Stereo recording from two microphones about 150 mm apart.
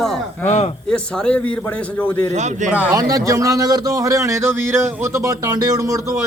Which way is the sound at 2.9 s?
25° right (ahead or behind).